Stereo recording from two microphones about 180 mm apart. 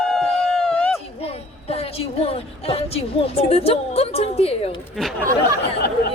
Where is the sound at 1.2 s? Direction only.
35° left (ahead or behind).